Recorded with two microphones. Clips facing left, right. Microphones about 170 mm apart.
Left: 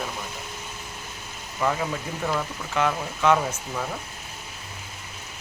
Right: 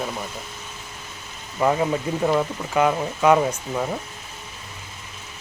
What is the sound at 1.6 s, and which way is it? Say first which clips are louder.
Speech: right 6 dB; 25° right (ahead or behind).